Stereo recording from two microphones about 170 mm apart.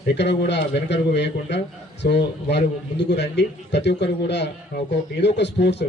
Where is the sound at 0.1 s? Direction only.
90° left.